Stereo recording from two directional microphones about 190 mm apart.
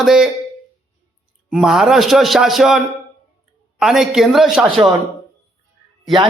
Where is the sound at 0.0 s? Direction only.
Centre (ahead or behind).